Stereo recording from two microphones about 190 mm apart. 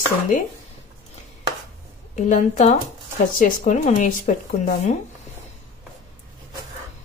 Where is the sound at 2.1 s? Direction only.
40° left (ahead or behind).